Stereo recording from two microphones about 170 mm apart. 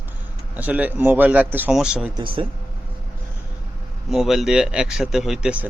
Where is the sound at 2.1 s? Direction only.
30° right (ahead or behind).